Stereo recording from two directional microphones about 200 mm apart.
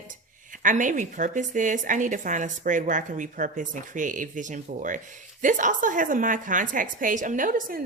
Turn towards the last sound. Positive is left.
turn(degrees=-45)  # may be behind; listen again after turning